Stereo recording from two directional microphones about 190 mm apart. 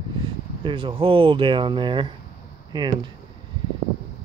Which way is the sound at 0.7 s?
25° right (ahead or behind).